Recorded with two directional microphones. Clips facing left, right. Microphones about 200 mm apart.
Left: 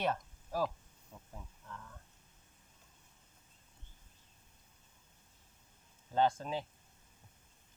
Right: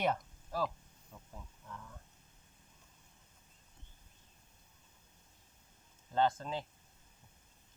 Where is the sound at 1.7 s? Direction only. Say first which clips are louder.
Right 1 dB; 15° right (ahead or behind).